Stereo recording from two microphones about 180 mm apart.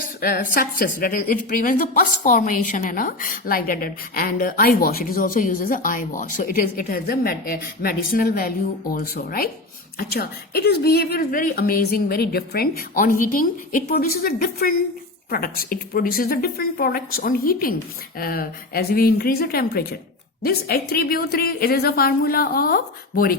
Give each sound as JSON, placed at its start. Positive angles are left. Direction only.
{"t": 0.2, "sound": "a woman's voice", "side_deg": 55}